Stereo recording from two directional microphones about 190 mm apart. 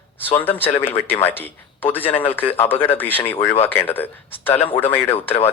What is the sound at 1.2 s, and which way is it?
Speech, 10° left (ahead or behind).